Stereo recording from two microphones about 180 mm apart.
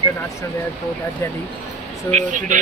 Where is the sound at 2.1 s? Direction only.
45° right (ahead or behind).